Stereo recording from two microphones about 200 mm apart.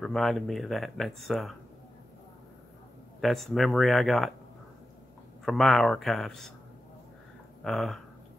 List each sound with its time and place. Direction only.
0.0 s speech: centre (ahead or behind)
3.2 s speech: centre (ahead or behind)
5.4 s speech: centre (ahead or behind)
7.6 s speech: centre (ahead or behind)